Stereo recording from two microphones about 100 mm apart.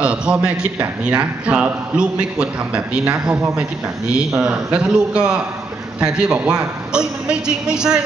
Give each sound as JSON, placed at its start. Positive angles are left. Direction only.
{"t": 0.0, "sound": "a man's voice", "side_deg": -10}